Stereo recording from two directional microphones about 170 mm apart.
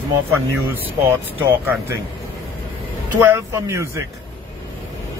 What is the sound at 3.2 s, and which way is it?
Speech, 15° right (ahead or behind).